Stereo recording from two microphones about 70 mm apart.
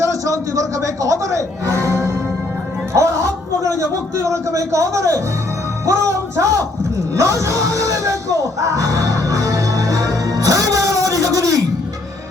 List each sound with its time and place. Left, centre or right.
0.0 s a sound: right
5.8 s speech: right
7.2 s music: right